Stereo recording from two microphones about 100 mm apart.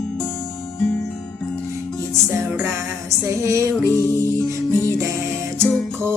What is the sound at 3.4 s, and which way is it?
Music, 30° right (ahead or behind).